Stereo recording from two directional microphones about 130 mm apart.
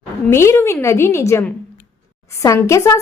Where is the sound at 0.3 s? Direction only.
20° left (ahead or behind).